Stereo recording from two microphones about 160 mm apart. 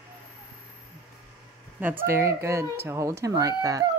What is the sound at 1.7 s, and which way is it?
A child's voice, 10° right (ahead or behind).